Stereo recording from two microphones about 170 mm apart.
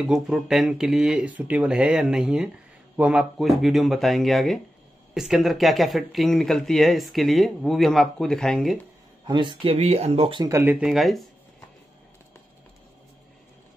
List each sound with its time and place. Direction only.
0.0 s speech: centre (ahead or behind)
9.2 s speech: 30° right (ahead or behind)
9.8 s speech: 40° right (ahead or behind)
10.5 s speech: 10° right (ahead or behind)